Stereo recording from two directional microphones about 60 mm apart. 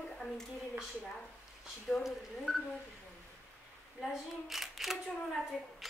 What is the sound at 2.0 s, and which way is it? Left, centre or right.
Speech, centre.